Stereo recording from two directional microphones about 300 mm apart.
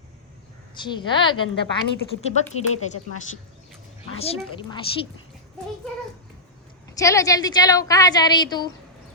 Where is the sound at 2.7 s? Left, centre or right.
Left.